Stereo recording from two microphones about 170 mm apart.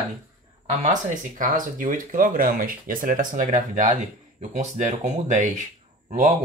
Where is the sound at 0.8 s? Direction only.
50° right (ahead or behind).